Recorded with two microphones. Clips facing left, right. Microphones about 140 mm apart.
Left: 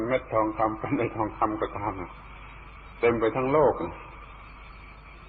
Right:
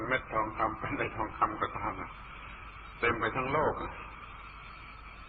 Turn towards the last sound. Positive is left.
turn(degrees=35)  # may be behind; listen again after turning